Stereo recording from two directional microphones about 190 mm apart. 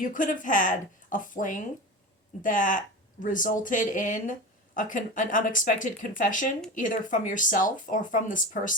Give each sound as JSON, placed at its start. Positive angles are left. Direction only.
{"t": 0.0, "sound": "speech", "side_deg": 45}